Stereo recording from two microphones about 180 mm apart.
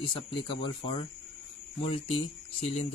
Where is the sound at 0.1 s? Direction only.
30° left (ahead or behind).